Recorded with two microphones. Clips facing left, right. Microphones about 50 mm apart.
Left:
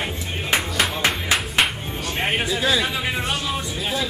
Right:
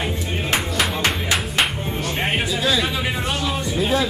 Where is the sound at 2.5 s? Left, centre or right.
Centre.